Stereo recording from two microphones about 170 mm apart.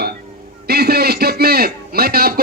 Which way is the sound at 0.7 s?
70° right (ahead or behind).